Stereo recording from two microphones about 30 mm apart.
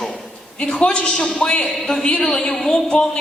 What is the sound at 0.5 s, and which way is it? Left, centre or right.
A man's voice, left.